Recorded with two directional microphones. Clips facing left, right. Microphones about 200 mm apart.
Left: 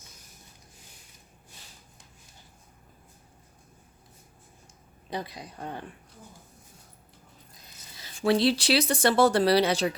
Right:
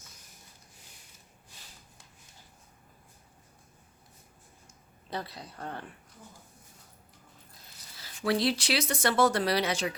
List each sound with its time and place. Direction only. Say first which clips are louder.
5.1 s a woman's voice: left 3 dB; 15° left (ahead or behind)
7.9 s speech: left 5 dB; 25° left (ahead or behind)